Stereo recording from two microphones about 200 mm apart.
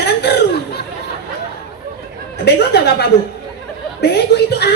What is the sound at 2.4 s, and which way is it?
A woman's voice, 55° left (ahead or behind).